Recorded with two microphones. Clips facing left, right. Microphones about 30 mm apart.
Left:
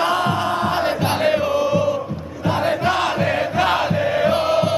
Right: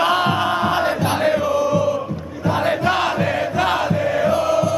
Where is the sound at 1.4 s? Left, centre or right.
Left.